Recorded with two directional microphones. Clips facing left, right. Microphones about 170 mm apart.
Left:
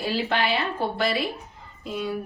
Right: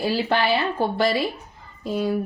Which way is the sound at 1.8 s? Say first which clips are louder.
Right 6 dB; 35° right (ahead or behind).